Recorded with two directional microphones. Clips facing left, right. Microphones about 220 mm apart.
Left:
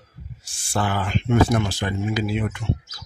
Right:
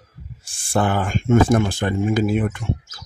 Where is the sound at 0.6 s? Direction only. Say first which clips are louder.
Right 5 dB; 50° right (ahead or behind).